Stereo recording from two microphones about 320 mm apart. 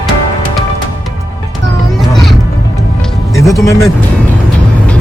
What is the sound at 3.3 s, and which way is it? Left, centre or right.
Music, centre.